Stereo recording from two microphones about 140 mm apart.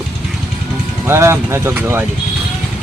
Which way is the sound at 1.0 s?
20° right (ahead or behind).